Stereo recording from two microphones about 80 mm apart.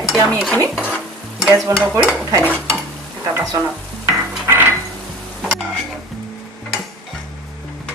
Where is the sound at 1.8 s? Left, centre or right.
Right.